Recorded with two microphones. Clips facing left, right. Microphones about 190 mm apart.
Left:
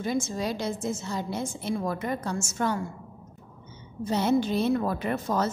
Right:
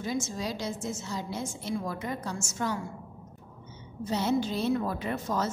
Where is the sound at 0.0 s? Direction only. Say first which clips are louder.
Left 4 dB; 60° left (ahead or behind).